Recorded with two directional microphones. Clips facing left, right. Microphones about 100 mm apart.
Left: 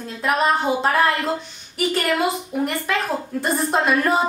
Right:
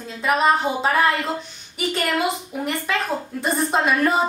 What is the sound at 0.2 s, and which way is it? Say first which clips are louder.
A woman's voice: right 1 dB; centre (ahead or behind).